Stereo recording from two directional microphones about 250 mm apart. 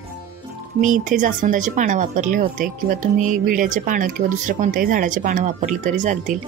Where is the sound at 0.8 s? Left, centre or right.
Right.